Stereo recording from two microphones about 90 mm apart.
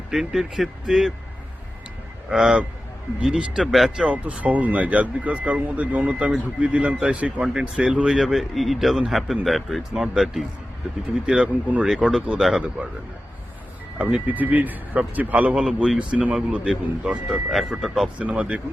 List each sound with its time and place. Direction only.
0.1 s speech: 5° right (ahead or behind)
2.3 s speech: 10° right (ahead or behind)
14.0 s speech: 15° right (ahead or behind)
15.6 s speech: 5° right (ahead or behind)